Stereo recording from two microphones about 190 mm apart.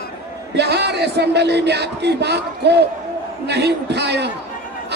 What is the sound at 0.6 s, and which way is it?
Music, 60° right (ahead or behind).